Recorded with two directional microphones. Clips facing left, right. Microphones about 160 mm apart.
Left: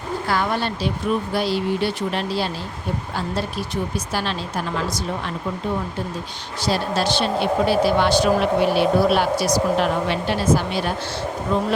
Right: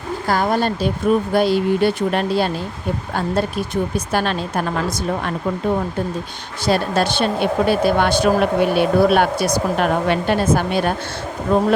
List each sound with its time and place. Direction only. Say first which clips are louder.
0.3 s speech: right 5 dB; 40° right (ahead or behind)
6.7 s speech: right 4 dB; 55° right (ahead or behind)